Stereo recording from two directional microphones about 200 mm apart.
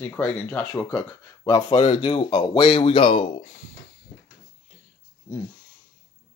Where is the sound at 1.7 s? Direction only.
30° left (ahead or behind).